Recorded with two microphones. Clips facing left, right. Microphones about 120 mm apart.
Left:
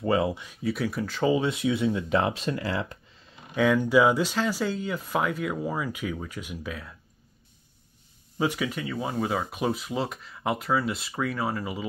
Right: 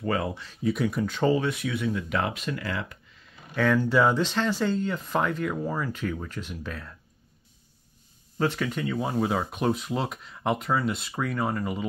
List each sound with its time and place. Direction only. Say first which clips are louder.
0.0 s speech: left 3 dB; 20° left (ahead or behind)
0.6 s speech: right 4 dB; centre (ahead or behind)
1.3 s speech: left 2 dB; 20° left (ahead or behind)
3.5 s speech: left 2 dB; 10° left (ahead or behind)
8.4 s speech: right 1 dB; 10° left (ahead or behind)